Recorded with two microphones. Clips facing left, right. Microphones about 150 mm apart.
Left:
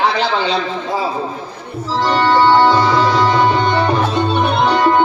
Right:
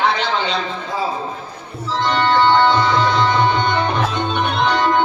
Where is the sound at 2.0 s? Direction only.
35° left (ahead or behind).